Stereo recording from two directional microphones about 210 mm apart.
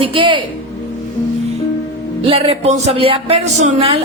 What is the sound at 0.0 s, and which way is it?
Speech, 25° right (ahead or behind).